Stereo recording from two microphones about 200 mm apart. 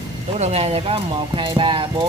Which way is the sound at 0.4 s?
30° right (ahead or behind).